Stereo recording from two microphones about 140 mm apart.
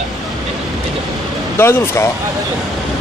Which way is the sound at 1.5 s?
15° left (ahead or behind).